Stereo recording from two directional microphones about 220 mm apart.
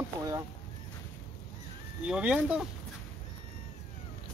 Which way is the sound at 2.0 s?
5° right (ahead or behind).